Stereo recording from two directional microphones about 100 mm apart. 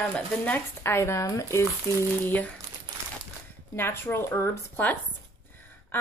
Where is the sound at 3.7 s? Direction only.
25° left (ahead or behind).